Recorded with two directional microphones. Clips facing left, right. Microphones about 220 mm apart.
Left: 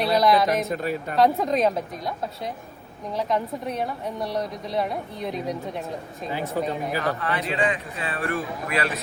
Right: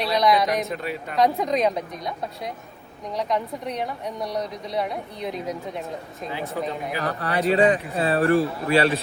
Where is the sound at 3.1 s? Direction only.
Centre (ahead or behind).